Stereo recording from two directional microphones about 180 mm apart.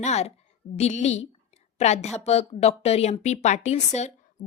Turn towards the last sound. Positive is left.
turn(degrees=40)  # may be behind; listen again after turning